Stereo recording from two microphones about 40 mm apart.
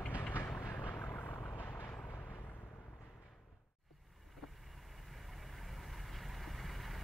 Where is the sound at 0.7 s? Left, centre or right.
Left.